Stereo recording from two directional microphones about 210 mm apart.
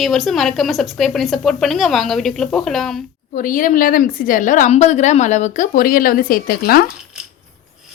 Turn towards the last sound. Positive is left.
turn(degrees=45)  # may be behind; listen again after turning